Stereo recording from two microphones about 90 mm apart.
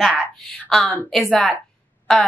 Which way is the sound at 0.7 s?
5° left (ahead or behind).